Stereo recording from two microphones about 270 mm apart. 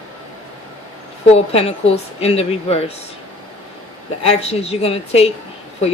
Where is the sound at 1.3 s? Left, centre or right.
Left.